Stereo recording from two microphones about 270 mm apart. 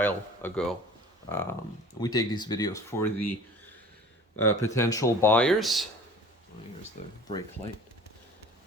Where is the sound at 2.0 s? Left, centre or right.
Centre.